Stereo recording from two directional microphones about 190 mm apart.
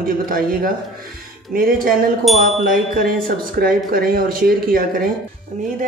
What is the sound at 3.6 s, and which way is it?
Speech, 50° right (ahead or behind).